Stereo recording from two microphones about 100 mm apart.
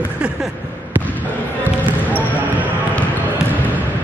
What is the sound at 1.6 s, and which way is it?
Basketball bounce, 15° right (ahead or behind).